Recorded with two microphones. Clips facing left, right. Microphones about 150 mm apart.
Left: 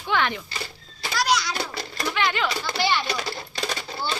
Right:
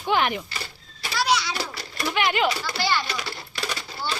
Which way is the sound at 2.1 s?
20° right (ahead or behind).